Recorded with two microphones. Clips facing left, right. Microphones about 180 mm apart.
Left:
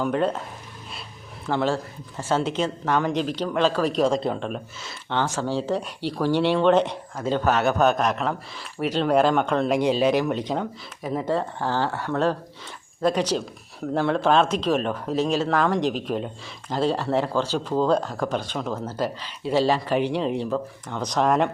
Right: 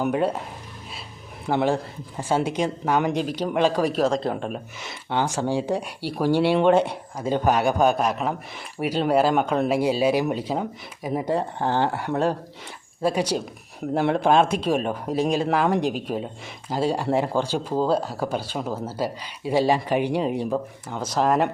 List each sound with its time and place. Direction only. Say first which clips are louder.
0.0 s speech: even; 10° right (ahead or behind)
1.5 s speech: right 2 dB; 15° right (ahead or behind)